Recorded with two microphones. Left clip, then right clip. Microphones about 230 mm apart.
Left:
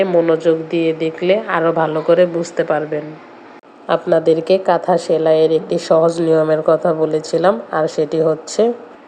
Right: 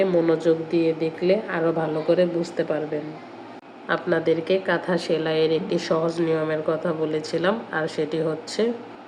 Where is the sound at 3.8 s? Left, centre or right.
Centre.